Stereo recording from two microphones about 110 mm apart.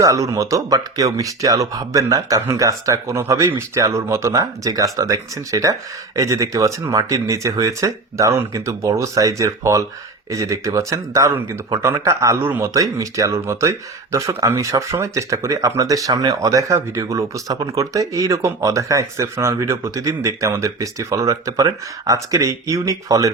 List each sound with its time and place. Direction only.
0.0 s speech: 30° right (ahead or behind)